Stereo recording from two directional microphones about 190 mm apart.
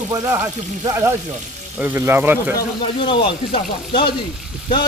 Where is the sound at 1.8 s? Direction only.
10° right (ahead or behind).